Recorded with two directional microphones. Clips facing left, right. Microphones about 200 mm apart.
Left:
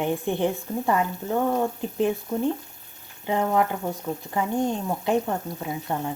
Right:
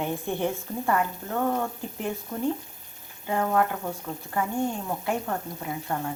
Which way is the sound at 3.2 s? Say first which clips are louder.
Left 2 dB; 20° left (ahead or behind).